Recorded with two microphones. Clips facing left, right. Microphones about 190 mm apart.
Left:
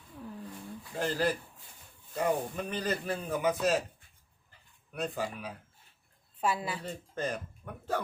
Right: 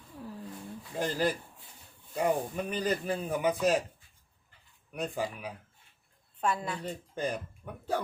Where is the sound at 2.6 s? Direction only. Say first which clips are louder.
Right 4 dB; 15° right (ahead or behind).